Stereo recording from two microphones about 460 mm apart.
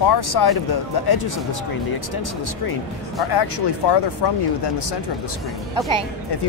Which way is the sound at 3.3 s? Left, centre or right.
Left.